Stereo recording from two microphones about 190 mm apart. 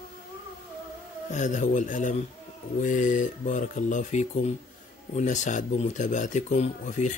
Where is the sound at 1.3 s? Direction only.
40° left (ahead or behind).